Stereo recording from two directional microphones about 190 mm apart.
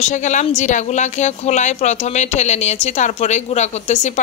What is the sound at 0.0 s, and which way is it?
Speech, 40° left (ahead or behind).